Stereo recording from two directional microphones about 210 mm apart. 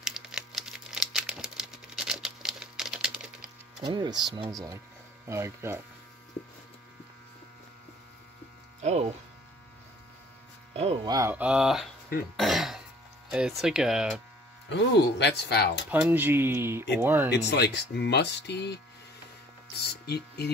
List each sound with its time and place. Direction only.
0.0 s a sound: 5° right (ahead or behind)
3.8 s speech: 20° right (ahead or behind)
5.3 s speech: 10° right (ahead or behind)
8.8 s speech: 30° right (ahead or behind)
10.7 s speech: 25° right (ahead or behind); by 11.9 s centre (ahead or behind)
12.4 s cough: centre (ahead or behind)
13.3 s speech: 5° right (ahead or behind)
14.7 s speech: 55° left (ahead or behind)
15.9 s speech: 10° right (ahead or behind)
17.3 s speech: 50° left (ahead or behind)
19.8 s speech: 50° left (ahead or behind)